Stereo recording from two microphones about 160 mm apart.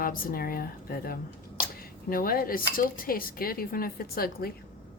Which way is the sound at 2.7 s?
60° left (ahead or behind).